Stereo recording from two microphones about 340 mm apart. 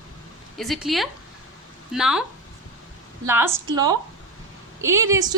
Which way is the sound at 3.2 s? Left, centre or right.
Centre.